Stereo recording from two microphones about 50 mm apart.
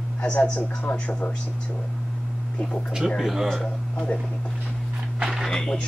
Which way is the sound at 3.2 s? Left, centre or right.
Centre.